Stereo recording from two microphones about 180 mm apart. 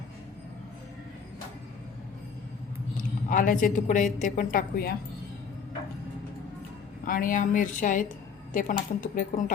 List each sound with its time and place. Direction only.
3.0 s a woman's voice: 50° left (ahead or behind)
7.0 s a woman's voice: 50° left (ahead or behind)